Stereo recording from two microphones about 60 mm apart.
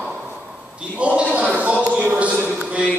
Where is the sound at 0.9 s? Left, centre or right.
Right.